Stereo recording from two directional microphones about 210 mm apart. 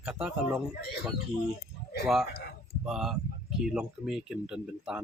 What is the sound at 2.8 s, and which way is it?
Speech, centre (ahead or behind).